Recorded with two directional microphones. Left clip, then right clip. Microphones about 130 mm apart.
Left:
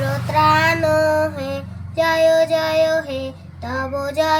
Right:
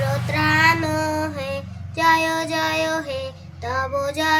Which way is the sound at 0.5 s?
25° right (ahead or behind).